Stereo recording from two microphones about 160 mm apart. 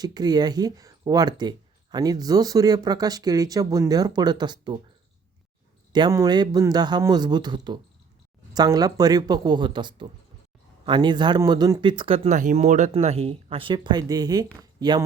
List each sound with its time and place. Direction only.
0.0 s speech: 25° right (ahead or behind)
5.9 s speech: 25° right (ahead or behind)
12.3 s speech: 50° right (ahead or behind); by 15.0 s 25° right (ahead or behind)